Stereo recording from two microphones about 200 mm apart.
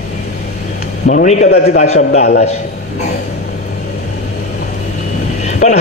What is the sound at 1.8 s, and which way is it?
Speech, 35° left (ahead or behind).